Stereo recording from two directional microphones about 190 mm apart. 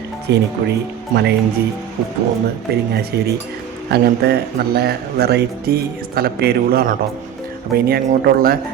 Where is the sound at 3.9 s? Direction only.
55° right (ahead or behind).